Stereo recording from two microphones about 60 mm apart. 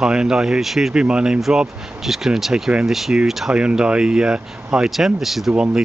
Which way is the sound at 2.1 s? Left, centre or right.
Centre.